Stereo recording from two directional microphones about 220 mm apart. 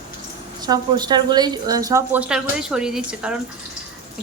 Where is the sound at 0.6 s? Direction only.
20° right (ahead or behind).